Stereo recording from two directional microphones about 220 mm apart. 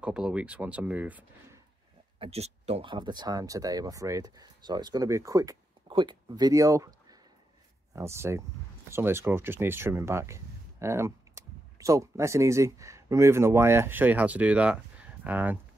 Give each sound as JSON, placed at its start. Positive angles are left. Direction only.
{"t": 0.0, "sound": "speech", "side_deg": -5}
{"t": 2.1, "sound": "speech", "side_deg": -25}